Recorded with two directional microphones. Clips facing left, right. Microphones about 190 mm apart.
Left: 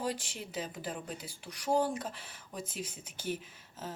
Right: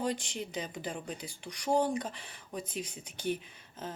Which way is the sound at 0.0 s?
5° left (ahead or behind).